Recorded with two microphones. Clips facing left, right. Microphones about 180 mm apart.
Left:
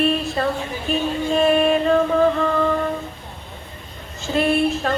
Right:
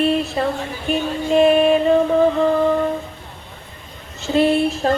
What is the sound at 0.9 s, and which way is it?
Music, 60° right (ahead or behind).